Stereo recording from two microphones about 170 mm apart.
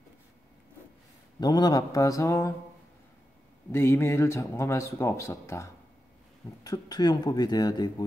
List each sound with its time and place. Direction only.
1.4 s speech: 25° left (ahead or behind)
3.7 s speech: 15° left (ahead or behind)